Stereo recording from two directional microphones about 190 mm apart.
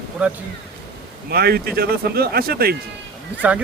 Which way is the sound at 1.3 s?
55° right (ahead or behind).